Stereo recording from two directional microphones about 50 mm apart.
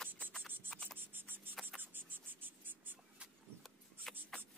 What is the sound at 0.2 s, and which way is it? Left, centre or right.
Cricket, centre.